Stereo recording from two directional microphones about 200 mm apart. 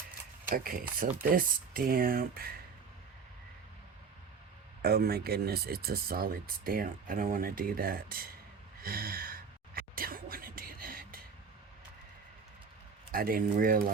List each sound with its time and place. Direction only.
0.4 s speech: 45° right (ahead or behind)
4.8 s speech: 50° right (ahead or behind)
8.8 s a sound: 45° right (ahead or behind)
13.1 s speech: 45° right (ahead or behind)